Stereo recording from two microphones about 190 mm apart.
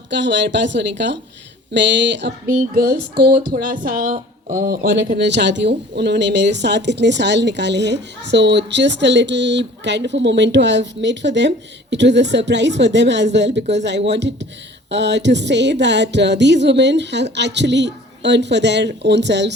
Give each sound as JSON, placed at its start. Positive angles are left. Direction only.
{"t": 0.1, "sound": "speech", "side_deg": -70}
{"t": 2.5, "sound": "speech", "side_deg": -50}
{"t": 3.5, "sound": "speech", "side_deg": -45}